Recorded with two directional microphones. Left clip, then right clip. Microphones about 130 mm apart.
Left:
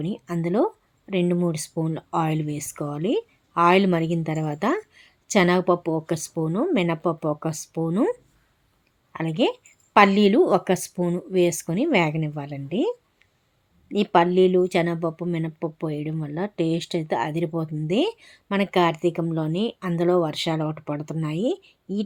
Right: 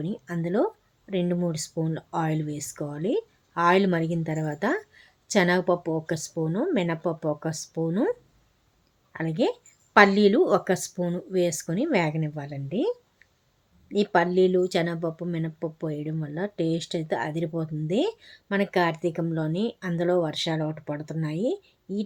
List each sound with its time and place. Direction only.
0.0 s speech: 25° left (ahead or behind)
9.1 s speech: 25° left (ahead or behind)